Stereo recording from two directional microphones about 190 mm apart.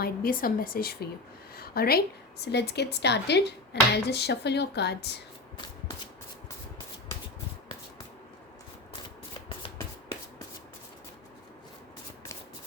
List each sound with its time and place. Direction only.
0.0 s a woman's voice: 50° left (ahead or behind)
1.5 s a sound: 55° left (ahead or behind)
2.4 s speech: 60° left (ahead or behind)